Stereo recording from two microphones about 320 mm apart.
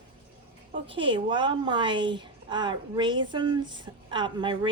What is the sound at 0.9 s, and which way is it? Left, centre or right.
A woman's voice, centre.